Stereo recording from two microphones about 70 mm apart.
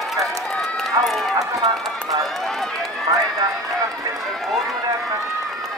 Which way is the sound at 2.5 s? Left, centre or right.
Centre.